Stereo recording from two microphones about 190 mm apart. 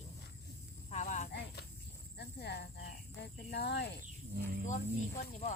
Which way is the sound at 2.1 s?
60° left (ahead or behind).